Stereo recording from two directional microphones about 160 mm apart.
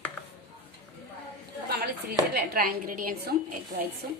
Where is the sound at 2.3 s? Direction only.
70° right (ahead or behind).